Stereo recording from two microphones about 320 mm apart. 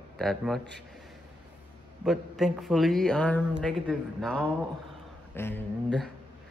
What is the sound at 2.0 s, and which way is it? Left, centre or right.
Speech, centre.